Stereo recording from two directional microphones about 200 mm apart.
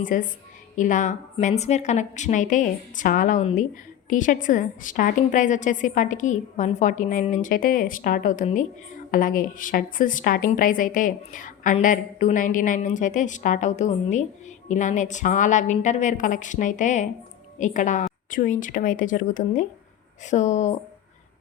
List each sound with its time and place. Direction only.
0.0 s a woman's voice: 40° left (ahead or behind)